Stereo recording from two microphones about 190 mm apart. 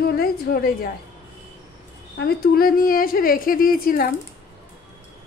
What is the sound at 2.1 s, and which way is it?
A woman's voice, 55° left (ahead or behind).